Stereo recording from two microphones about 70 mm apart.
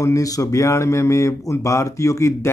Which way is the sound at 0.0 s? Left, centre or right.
Left.